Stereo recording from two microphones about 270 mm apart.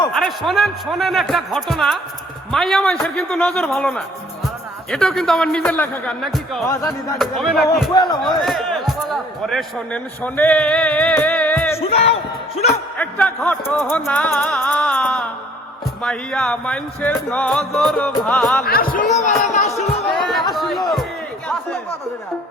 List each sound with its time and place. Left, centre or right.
0.1 s music: centre
6.7 s speech: centre
7.2 s music: centre
7.9 s speech: centre
8.4 s speech: centre
11.8 s a sound: left
13.0 s music: centre
18.6 s speech: left
19.7 s music: centre
20.5 s chatter: centre